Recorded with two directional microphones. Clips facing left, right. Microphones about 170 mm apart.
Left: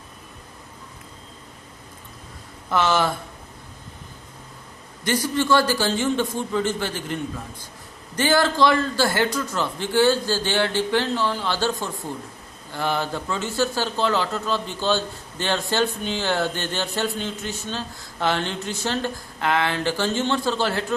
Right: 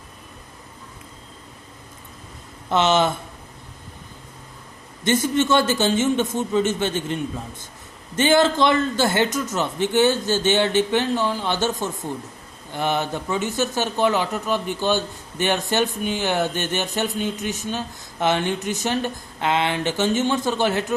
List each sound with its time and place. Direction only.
2.6 s a man's voice: 25° right (ahead or behind)
5.0 s a man's voice: 25° right (ahead or behind)